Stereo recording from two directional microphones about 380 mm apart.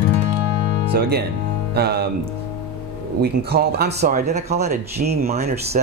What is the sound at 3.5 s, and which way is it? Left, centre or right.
Speech, right.